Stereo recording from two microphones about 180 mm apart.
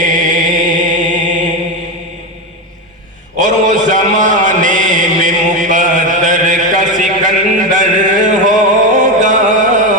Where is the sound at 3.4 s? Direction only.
45° right (ahead or behind).